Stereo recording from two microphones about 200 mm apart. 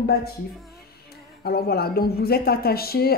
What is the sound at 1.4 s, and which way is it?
Speech, 50° left (ahead or behind).